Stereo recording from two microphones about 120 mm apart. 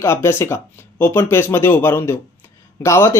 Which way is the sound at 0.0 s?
20° left (ahead or behind).